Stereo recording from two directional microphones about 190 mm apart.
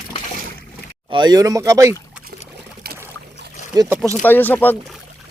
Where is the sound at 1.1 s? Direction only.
20° right (ahead or behind).